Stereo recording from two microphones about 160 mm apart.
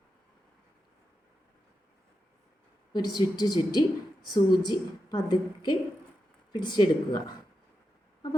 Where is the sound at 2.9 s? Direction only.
25° left (ahead or behind).